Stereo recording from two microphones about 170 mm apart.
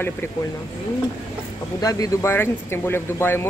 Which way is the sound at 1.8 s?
20° left (ahead or behind).